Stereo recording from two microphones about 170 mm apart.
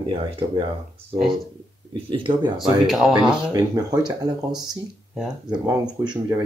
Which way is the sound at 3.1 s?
25° right (ahead or behind).